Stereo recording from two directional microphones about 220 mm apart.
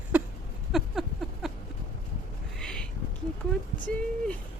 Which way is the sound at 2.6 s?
5° left (ahead or behind).